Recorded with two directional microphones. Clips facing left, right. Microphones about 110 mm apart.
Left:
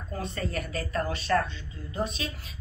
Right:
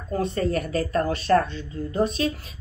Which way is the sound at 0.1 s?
40° right (ahead or behind).